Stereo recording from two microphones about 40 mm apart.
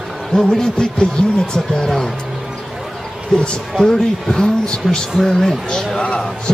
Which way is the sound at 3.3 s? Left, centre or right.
Centre.